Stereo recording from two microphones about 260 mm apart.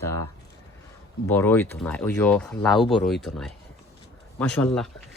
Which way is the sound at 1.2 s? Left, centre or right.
Centre.